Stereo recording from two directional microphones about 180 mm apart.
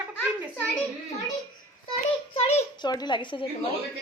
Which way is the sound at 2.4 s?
35° left (ahead or behind).